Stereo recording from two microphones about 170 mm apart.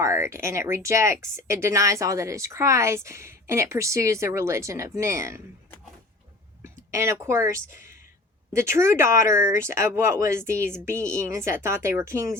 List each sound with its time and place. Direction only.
0.0 s speech: 15° right (ahead or behind)
6.6 s speech: 15° right (ahead or behind)